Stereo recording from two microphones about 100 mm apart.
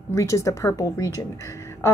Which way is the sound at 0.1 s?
30° left (ahead or behind).